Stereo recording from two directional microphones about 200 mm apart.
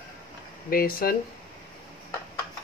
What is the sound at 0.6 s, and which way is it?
Speech, 45° left (ahead or behind).